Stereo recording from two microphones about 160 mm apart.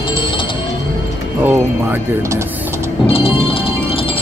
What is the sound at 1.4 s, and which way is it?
Music, 10° right (ahead or behind).